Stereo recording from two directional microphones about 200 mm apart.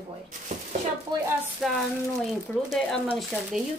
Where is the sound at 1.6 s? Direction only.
Centre (ahead or behind).